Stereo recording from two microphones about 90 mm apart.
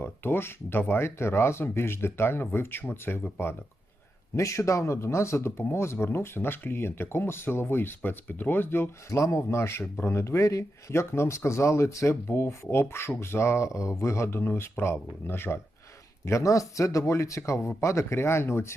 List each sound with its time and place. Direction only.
0.0 s speech: 25° left (ahead or behind)